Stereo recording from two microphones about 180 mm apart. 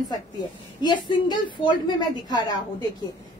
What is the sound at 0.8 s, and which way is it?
A woman's voice, 25° left (ahead or behind).